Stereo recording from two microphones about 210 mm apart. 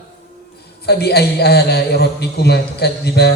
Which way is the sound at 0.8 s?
50° left (ahead or behind).